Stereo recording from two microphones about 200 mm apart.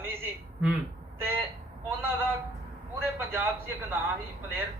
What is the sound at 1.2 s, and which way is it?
Speech, 10° right (ahead or behind).